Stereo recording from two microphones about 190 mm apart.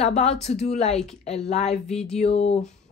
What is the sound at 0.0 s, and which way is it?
Speech, 35° left (ahead or behind).